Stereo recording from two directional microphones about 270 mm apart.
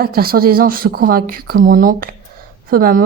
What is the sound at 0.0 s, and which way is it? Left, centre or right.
Speech, right.